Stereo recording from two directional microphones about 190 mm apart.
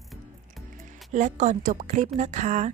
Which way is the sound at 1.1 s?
40° right (ahead or behind).